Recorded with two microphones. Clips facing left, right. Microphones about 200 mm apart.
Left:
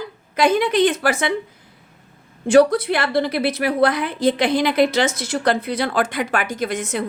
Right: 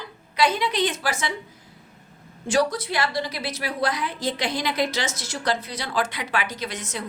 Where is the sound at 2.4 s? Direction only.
60° left (ahead or behind).